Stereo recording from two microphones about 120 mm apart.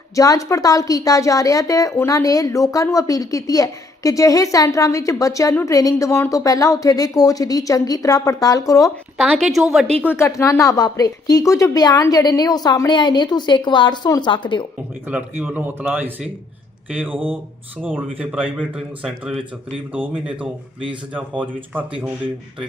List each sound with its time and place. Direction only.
0.2 s a woman's voice: 30° left (ahead or behind)
9.3 s a woman's voice: centre (ahead or behind)
10.0 s a woman's voice: 20° left (ahead or behind); by 14.7 s 40° left (ahead or behind)
15.0 s speech: 15° right (ahead or behind)
18.2 s a woman's voice: 10° right (ahead or behind)
21.1 s speech: 15° right (ahead or behind)